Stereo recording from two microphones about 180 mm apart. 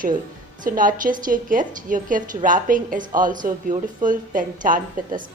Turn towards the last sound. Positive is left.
turn(degrees=-50)  # may be behind; listen again after turning